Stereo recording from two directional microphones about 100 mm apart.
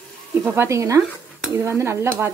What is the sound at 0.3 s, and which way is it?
Speech, 25° right (ahead or behind).